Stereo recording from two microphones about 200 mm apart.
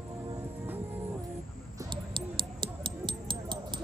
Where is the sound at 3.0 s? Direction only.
25° right (ahead or behind).